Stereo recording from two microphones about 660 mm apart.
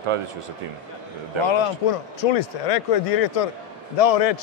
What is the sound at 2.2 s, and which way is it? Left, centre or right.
Speech, left.